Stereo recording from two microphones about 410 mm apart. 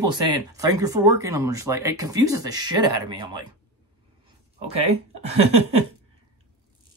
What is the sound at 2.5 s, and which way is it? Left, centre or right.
Speech, right.